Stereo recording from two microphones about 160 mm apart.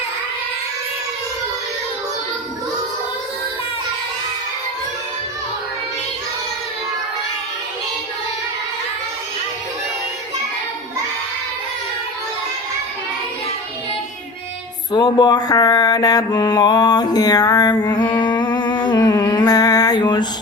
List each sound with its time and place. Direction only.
14.9 s mantra: 25° left (ahead or behind)